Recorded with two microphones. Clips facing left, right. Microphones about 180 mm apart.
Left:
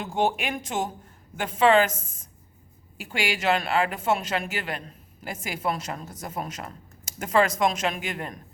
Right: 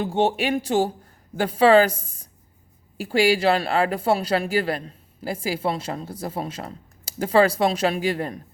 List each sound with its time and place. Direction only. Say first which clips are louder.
0.0 s speech: right 4 dB; 25° right (ahead or behind)